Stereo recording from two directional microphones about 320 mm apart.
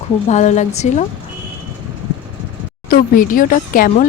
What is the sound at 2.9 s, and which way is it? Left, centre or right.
Speech, left.